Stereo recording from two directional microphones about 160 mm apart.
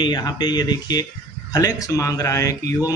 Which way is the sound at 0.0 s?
25° left (ahead or behind).